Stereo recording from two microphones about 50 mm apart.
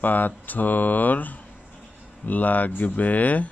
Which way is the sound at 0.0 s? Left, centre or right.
Left.